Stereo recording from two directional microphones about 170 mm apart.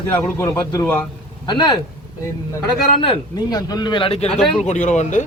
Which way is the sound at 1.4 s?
25° left (ahead or behind).